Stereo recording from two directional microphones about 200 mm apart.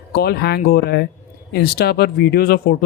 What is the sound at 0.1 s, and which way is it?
Speech, 50° left (ahead or behind).